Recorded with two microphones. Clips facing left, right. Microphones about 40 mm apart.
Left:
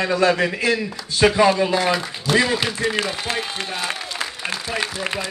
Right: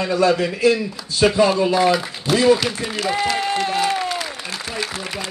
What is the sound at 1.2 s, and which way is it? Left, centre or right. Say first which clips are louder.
A man's voice: even; left.